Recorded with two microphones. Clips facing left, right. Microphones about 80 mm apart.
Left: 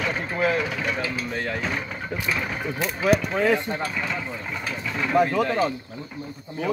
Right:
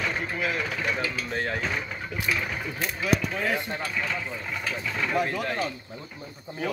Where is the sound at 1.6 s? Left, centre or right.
Centre.